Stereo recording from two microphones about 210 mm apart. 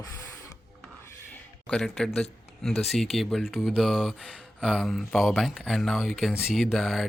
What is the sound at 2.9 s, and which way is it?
Speech, centre (ahead or behind).